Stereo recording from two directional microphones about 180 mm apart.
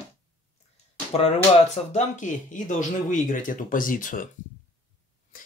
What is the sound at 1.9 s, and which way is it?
Speech, 40° left (ahead or behind).